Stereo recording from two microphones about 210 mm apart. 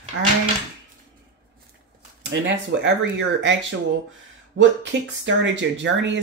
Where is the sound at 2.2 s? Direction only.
55° right (ahead or behind).